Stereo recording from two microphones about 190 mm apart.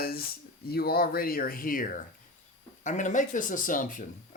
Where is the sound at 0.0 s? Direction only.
55° left (ahead or behind).